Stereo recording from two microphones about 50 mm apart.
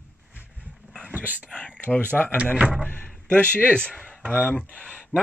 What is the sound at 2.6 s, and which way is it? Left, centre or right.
Speech, centre.